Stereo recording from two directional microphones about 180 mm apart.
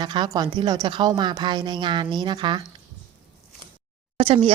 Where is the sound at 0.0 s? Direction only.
25° right (ahead or behind).